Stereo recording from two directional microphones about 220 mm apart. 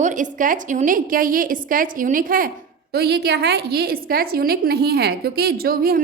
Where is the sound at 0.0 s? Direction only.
35° right (ahead or behind).